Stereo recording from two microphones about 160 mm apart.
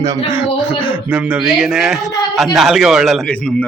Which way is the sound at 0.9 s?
10° right (ahead or behind).